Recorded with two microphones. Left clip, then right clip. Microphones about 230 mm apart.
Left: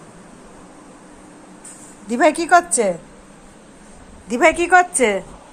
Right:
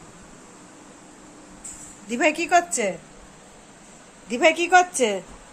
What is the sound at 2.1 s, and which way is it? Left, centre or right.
Speech, centre.